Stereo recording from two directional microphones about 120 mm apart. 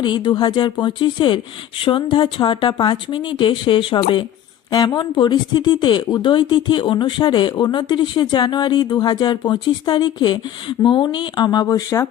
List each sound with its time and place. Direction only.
0.0 s speech: 40° left (ahead or behind)
4.7 s speech: 30° left (ahead or behind)